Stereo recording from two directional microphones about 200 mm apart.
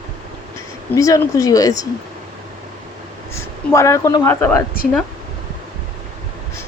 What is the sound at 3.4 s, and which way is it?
Speech, 15° left (ahead or behind).